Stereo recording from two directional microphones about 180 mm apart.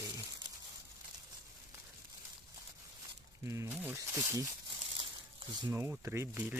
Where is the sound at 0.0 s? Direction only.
20° right (ahead or behind).